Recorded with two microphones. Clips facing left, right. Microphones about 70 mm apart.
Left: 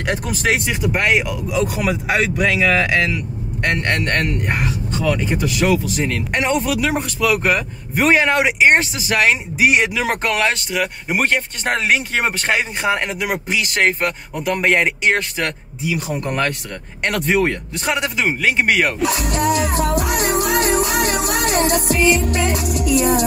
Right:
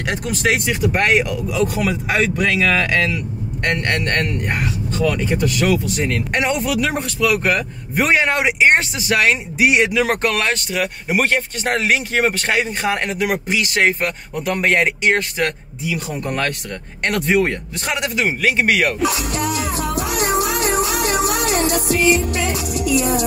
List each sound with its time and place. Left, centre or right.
0.0 s speech: centre
1.5 s speech: centre
2.0 s speech: centre
6.3 s speech: centre
19.0 s music: left